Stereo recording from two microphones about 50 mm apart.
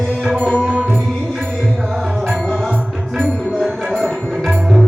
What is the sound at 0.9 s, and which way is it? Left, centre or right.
Music, centre.